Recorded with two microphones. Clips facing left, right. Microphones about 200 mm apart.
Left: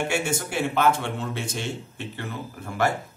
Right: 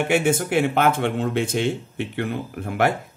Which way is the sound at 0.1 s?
55° right (ahead or behind).